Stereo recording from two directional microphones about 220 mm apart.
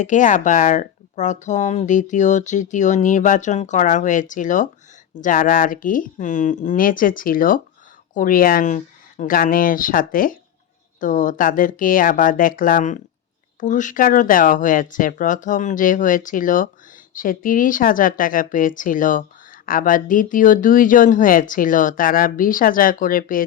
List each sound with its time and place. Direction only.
0.0 s speech: 35° left (ahead or behind)